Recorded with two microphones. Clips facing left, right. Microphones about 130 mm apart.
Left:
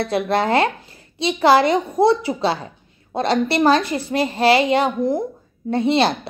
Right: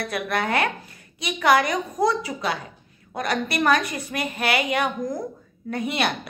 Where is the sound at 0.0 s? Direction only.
30° left (ahead or behind).